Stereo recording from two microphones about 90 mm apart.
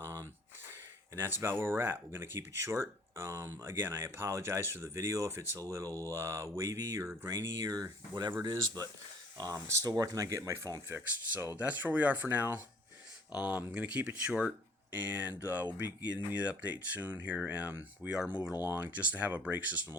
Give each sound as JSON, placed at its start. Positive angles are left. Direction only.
{"t": 0.0, "sound": "a sound", "side_deg": -30}
{"t": 1.1, "sound": "speech", "side_deg": -30}
{"t": 11.5, "sound": "speech", "side_deg": -15}